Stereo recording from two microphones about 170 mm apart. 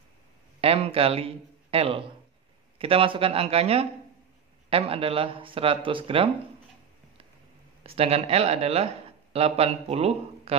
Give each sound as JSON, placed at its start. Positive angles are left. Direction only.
{"t": 0.6, "sound": "a man's voice", "side_deg": -35}
{"t": 7.8, "sound": "speech", "side_deg": -35}